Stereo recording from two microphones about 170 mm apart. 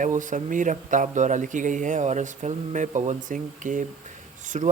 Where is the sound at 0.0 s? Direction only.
50° right (ahead or behind).